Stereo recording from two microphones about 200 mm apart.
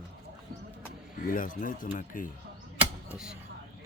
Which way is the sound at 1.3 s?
45° left (ahead or behind).